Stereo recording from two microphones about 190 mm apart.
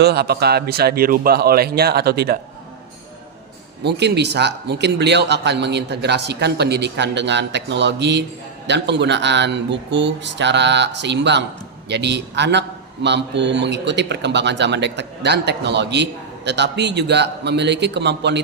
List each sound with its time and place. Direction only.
0.0 s a man's voice: 55° right (ahead or behind)
3.8 s a man's voice: 60° right (ahead or behind)